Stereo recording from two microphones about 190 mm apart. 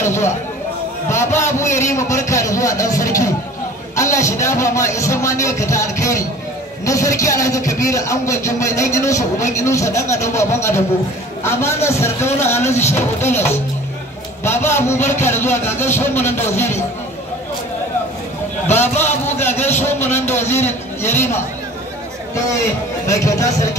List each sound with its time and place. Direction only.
0.0 s a sound: 15° left (ahead or behind)
1.0 s speech: 15° left (ahead or behind)
18.7 s speech: 10° left (ahead or behind)
23.0 s speech: 15° left (ahead or behind)